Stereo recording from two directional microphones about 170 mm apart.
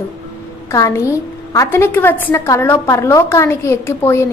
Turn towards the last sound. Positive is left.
turn(degrees=15)  # may be behind; listen again after turning